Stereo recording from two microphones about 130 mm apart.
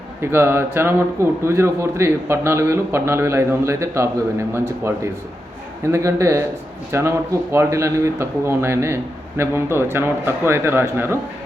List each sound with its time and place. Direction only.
0.2 s speech: 20° right (ahead or behind)